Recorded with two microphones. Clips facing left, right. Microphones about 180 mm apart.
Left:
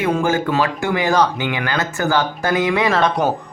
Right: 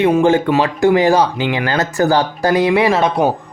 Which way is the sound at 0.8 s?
35° right (ahead or behind).